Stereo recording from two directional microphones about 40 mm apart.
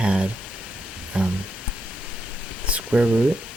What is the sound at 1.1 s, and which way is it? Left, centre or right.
Music, right.